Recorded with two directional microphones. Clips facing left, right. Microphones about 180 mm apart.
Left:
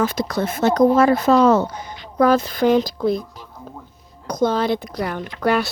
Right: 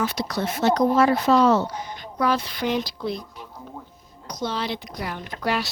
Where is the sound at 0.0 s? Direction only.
50° left (ahead or behind).